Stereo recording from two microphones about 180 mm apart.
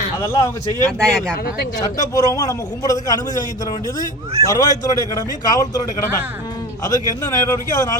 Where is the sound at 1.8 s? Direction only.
20° left (ahead or behind).